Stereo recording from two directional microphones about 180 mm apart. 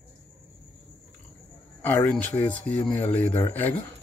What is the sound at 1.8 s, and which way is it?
Speech, 10° left (ahead or behind).